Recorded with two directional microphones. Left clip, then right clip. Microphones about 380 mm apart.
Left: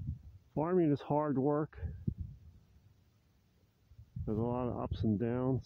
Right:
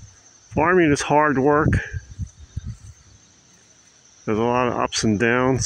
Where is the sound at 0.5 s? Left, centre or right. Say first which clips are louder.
Right 15 dB; left.